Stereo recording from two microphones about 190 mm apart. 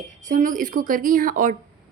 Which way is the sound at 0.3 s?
45° right (ahead or behind).